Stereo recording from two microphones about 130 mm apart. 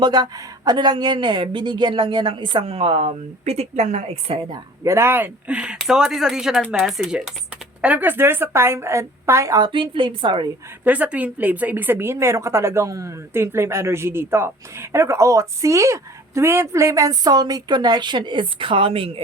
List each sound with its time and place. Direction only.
0.0 s speech: 30° right (ahead or behind); by 4.5 s 50° right (ahead or behind)
4.8 s a woman's voice: 20° right (ahead or behind); by 10.5 s 40° right (ahead or behind)
10.8 s a woman's voice: 10° right (ahead or behind); by 19.2 s 45° right (ahead or behind)